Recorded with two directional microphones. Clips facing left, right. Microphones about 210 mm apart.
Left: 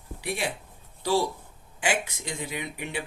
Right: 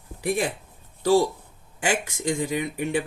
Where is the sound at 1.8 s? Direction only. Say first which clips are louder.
Right 4 dB; 45° right (ahead or behind).